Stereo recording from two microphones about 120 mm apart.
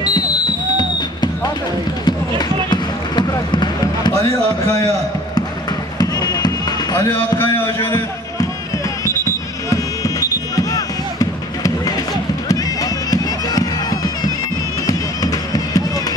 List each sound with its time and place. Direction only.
0.7 s music: 35° left (ahead or behind)
2.0 s basketball bounce: 35° left (ahead or behind)
5.9 s basketball bounce: 30° left (ahead or behind)
9.0 s basketball bounce: 30° left (ahead or behind)
13.1 s bagpipes: 30° left (ahead or behind)
14.9 s music: 30° left (ahead or behind)